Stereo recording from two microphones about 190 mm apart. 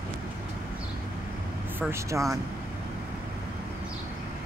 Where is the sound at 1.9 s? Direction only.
15° right (ahead or behind).